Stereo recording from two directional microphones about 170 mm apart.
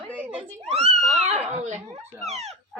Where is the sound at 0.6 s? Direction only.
40° right (ahead or behind).